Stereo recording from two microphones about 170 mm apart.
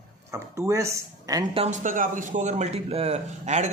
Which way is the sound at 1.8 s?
50° right (ahead or behind).